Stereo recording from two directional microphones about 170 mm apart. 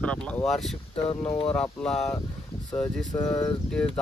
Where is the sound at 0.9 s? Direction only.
30° left (ahead or behind).